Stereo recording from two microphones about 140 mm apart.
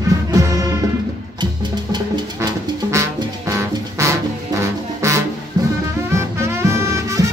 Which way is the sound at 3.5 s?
20° right (ahead or behind).